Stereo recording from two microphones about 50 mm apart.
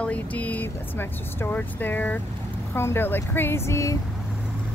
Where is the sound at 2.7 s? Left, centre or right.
Left.